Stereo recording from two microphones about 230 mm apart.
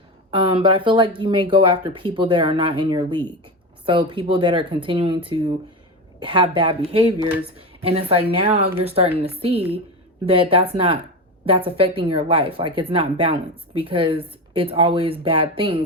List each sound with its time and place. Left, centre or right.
0.3 s a woman's voice: right